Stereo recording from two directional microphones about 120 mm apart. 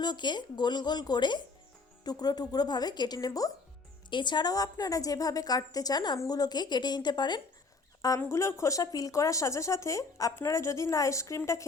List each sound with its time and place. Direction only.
0.0 s a woman's voice: 35° left (ahead or behind)
8.2 s speech: 25° left (ahead or behind)